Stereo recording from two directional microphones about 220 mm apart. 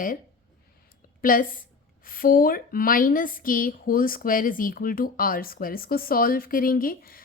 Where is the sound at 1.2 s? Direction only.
40° left (ahead or behind).